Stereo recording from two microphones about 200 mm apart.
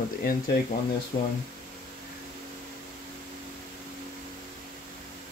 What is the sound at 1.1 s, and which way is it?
Speech, 55° left (ahead or behind).